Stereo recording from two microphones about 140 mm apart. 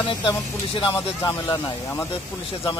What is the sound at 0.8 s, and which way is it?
Speech, 35° left (ahead or behind).